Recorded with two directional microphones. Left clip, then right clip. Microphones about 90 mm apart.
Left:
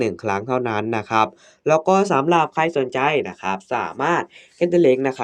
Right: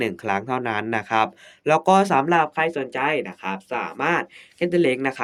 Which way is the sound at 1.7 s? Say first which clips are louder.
Left 1 dB; 5° left (ahead or behind).